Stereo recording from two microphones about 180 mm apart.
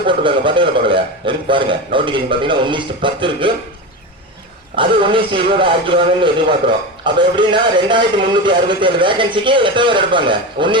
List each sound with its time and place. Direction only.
0.0 s a man's voice: 30° right (ahead or behind)
4.8 s a man's voice: 30° right (ahead or behind)